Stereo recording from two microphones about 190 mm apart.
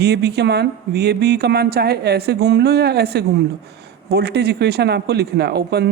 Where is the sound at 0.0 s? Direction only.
60° right (ahead or behind).